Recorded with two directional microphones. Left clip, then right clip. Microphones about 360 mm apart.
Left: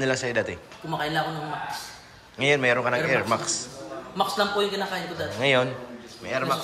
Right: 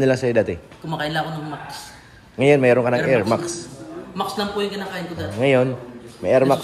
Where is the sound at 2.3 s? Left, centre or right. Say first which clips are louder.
Right 7 dB; centre.